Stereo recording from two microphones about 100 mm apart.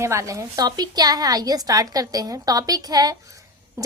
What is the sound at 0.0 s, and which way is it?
A woman's voice, 30° right (ahead or behind).